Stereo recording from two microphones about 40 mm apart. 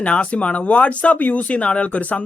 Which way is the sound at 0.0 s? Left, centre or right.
Left.